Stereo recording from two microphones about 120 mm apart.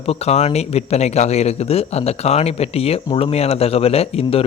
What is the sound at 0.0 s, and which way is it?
Speech, 60° left (ahead or behind).